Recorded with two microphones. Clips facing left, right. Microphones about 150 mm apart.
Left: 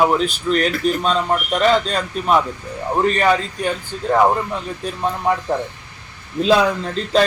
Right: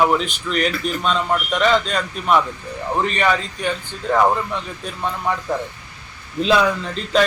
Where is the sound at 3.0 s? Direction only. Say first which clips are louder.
Left 4 dB; 40° left (ahead or behind).